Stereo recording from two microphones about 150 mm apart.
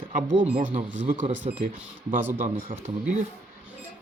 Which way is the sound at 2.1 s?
15° right (ahead or behind).